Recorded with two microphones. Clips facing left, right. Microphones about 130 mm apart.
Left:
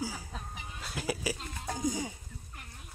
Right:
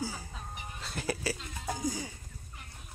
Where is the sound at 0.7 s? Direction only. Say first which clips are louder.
Even; 5° left (ahead or behind).